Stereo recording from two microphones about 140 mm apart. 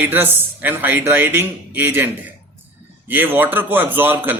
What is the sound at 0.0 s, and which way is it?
Speech, 15° right (ahead or behind).